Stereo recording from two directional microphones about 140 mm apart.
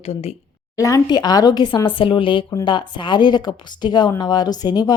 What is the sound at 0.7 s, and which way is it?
Speech, 25° left (ahead or behind).